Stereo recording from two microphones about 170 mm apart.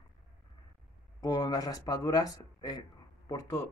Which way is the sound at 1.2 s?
20° left (ahead or behind).